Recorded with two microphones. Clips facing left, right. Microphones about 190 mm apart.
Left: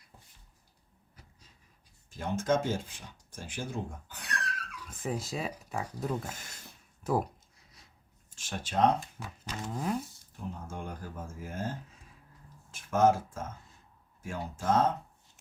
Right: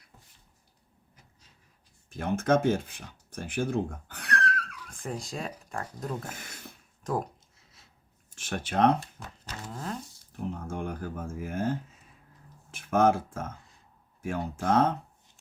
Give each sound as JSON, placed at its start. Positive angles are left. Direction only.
{"t": 2.0, "sound": "speech", "side_deg": -60}
{"t": 4.8, "sound": "speech", "side_deg": 5}
{"t": 6.3, "sound": "a sound", "side_deg": -60}
{"t": 7.0, "sound": "speech", "side_deg": 5}
{"t": 8.4, "sound": "speech", "side_deg": -60}
{"t": 9.2, "sound": "speech", "side_deg": 0}
{"t": 10.3, "sound": "speech", "side_deg": -60}
{"t": 12.7, "sound": "speech", "side_deg": -60}